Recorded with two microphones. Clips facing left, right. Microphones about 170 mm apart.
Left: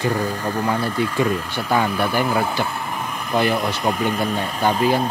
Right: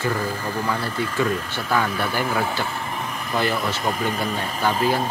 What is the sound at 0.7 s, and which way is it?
Speech, 15° left (ahead or behind).